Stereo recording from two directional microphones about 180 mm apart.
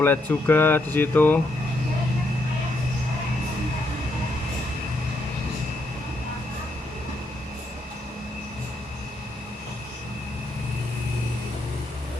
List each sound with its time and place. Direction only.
0.0 s speech: 10° left (ahead or behind)